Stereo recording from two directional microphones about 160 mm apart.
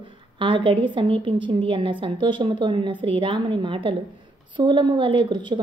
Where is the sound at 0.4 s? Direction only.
30° right (ahead or behind).